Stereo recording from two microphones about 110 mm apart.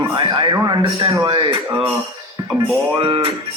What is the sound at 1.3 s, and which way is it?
Music, 45° right (ahead or behind).